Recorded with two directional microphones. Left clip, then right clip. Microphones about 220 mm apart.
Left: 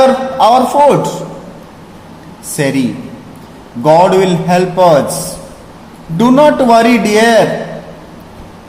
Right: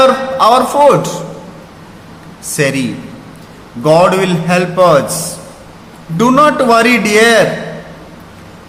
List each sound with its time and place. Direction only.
0.0 s a man's voice: 15° right (ahead or behind)
2.6 s a man's voice: 15° right (ahead or behind)
6.1 s a man's voice: 15° right (ahead or behind)